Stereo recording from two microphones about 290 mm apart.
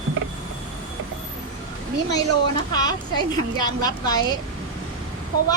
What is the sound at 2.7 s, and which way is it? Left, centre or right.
Speech, centre.